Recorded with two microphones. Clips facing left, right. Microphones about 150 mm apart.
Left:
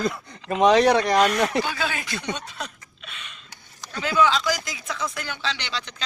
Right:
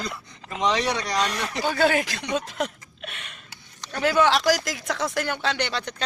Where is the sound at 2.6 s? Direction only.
70° right (ahead or behind).